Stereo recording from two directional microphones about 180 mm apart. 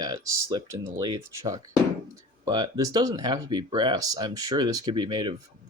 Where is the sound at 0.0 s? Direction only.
20° right (ahead or behind).